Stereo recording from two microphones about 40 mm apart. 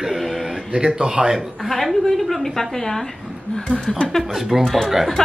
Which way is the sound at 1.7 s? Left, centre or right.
Centre.